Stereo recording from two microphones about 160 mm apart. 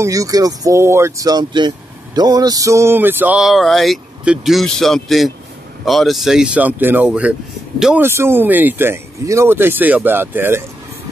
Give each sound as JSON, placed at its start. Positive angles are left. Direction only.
{"t": 0.0, "sound": "speech", "side_deg": -20}
{"t": 2.1, "sound": "a sound", "side_deg": -25}
{"t": 5.9, "sound": "speech", "side_deg": 0}